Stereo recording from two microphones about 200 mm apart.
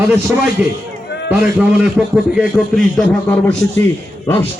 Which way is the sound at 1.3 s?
10° right (ahead or behind).